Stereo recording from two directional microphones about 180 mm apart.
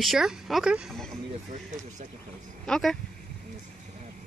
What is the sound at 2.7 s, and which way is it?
Speech, centre (ahead or behind).